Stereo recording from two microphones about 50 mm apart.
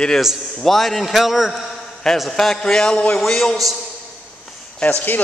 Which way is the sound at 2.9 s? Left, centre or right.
Left.